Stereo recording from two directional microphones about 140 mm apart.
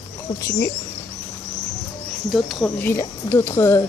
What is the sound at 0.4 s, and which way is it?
Speech, 20° left (ahead or behind).